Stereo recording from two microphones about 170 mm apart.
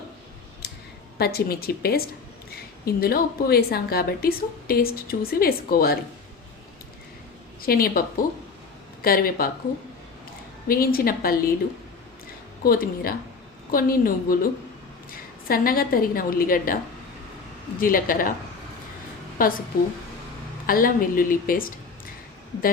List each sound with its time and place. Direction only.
1.2 s a woman's voice: 65° left (ahead or behind)
7.6 s a woman's voice: 60° left (ahead or behind)
10.7 s a woman's voice: 60° left (ahead or behind)
12.6 s a woman's voice: 60° left (ahead or behind)
17.7 s a woman's voice: 55° left (ahead or behind)
19.4 s a woman's voice: 55° left (ahead or behind)
20.7 s a woman's voice: 55° left (ahead or behind)